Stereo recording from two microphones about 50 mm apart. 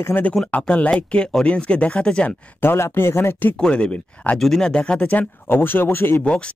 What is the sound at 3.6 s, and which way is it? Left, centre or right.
Speech, left.